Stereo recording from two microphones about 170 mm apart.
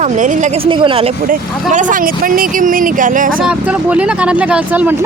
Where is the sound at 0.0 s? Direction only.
45° right (ahead or behind).